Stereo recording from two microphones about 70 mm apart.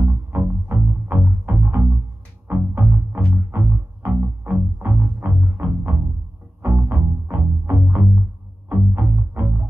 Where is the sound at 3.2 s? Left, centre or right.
Right.